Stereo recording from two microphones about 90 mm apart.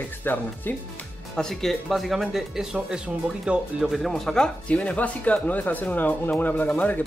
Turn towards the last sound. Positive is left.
turn(degrees=20)  # may be behind; listen again after turning